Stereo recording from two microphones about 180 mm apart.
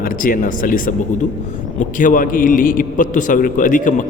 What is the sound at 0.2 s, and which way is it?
Speech, 50° left (ahead or behind).